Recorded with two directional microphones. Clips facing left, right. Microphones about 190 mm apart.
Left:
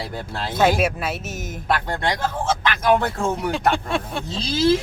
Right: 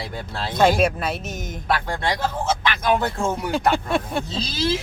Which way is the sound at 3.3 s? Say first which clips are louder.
Even; centre (ahead or behind).